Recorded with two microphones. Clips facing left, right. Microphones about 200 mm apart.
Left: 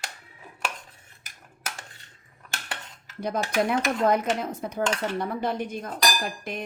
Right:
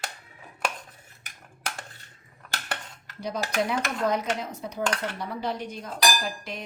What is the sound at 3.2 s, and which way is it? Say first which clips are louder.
Dishes: left 3 dB; 50° left (ahead or behind).